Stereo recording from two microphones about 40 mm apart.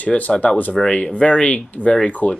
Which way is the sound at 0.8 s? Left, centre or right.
Centre.